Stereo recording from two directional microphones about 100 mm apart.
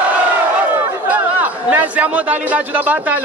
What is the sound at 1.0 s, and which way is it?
Speech, 15° right (ahead or behind).